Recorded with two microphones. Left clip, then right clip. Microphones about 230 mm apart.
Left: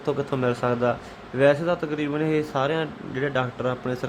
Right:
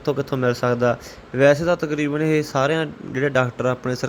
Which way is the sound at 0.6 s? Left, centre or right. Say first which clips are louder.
Right 4 dB; centre.